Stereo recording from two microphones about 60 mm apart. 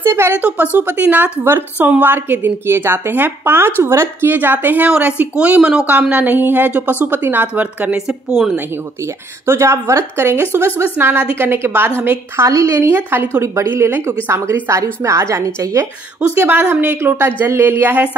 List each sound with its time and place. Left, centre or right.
0.0 s speech: right
0.4 s a woman's voice: right
1.4 s a woman's voice: right
4.8 s a woman's voice: right
7.9 s a woman's voice: centre
9.0 s a woman's voice: right
12.4 s a woman's voice: right
12.7 s a woman's voice: right
16.6 s a woman's voice: right